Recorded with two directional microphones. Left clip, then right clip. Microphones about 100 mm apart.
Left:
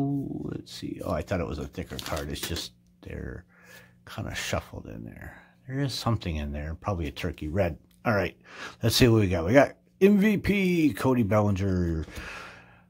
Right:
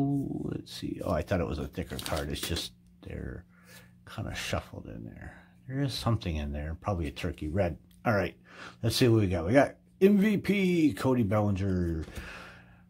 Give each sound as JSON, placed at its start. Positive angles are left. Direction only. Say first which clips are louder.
{"t": 0.0, "sound": "speech", "louder": "left 1 dB", "side_deg": 5}
{"t": 3.0, "sound": "speech", "louder": "left 3 dB", "side_deg": 15}